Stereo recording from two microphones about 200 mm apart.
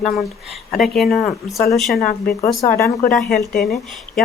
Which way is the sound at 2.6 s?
15° left (ahead or behind).